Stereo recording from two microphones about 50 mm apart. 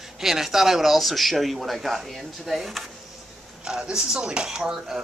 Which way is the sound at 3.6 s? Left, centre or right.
Centre.